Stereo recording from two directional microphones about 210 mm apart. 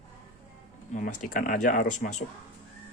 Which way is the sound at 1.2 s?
40° left (ahead or behind).